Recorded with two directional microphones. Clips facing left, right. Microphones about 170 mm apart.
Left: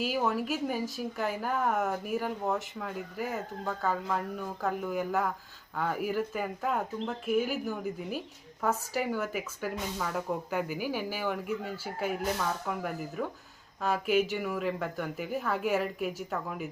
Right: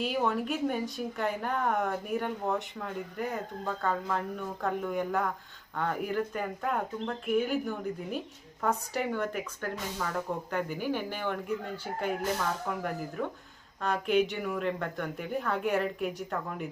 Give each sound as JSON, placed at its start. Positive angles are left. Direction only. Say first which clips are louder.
{"t": 0.0, "sound": "speech", "louder": "even", "side_deg": 0}